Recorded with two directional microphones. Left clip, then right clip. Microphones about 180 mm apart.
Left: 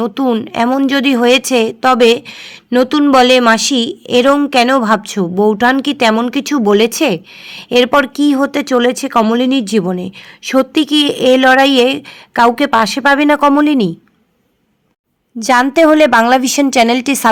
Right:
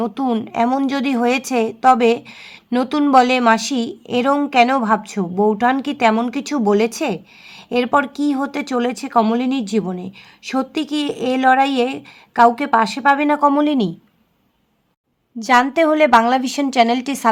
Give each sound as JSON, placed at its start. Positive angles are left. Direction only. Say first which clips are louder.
{"t": 0.0, "sound": "a woman's voice", "louder": "left 6 dB", "side_deg": 25}
{"t": 15.4, "sound": "a woman's voice", "louder": "left 5 dB", "side_deg": 30}